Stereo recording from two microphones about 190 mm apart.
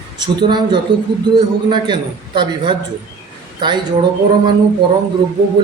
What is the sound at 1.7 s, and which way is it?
A man's voice, 25° right (ahead or behind).